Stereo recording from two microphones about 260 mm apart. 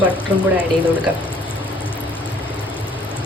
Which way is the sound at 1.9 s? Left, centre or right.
Centre.